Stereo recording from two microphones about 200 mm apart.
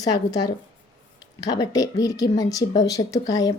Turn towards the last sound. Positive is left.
turn(degrees=20)  # may be behind; listen again after turning